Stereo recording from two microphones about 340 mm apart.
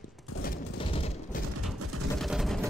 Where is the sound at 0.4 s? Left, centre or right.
Left.